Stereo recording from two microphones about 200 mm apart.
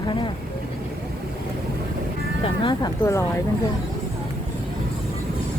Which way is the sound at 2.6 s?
15° left (ahead or behind).